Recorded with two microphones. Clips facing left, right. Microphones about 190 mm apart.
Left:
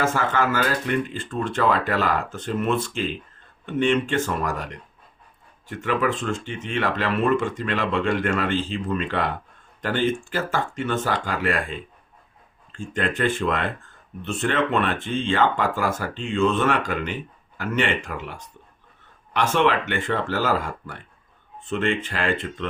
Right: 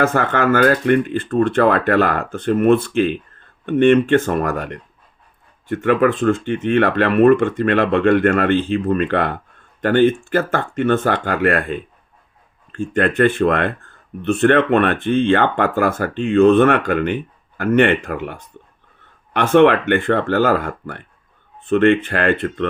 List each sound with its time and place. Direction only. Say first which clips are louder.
0.0 s speech: right 6 dB; 55° right (ahead or behind)